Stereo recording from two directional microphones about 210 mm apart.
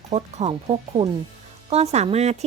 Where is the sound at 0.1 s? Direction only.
30° right (ahead or behind).